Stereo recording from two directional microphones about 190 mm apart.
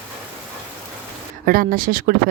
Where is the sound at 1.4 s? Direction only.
50° right (ahead or behind).